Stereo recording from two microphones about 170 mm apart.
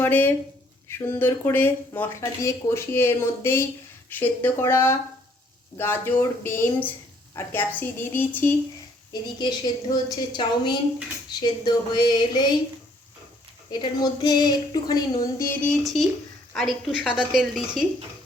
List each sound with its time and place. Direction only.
0.0 s speech: 10° left (ahead or behind)
9.4 s a woman's voice: 25° left (ahead or behind)
13.7 s a woman's voice: 25° left (ahead or behind)
15.6 s a woman's voice: centre (ahead or behind)